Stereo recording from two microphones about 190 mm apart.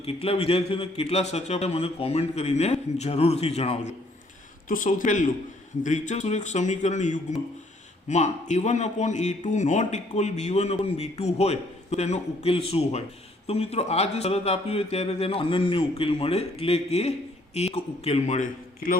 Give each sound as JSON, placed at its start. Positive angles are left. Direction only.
{"t": 0.0, "sound": "speech", "side_deg": 30}